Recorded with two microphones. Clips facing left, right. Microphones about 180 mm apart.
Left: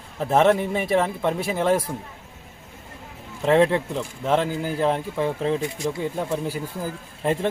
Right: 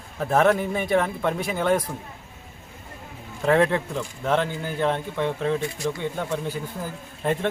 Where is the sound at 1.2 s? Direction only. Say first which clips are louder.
Left 1 dB; 30° left (ahead or behind).